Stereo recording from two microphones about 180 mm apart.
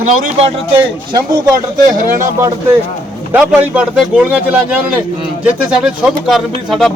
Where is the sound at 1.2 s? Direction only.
20° right (ahead or behind).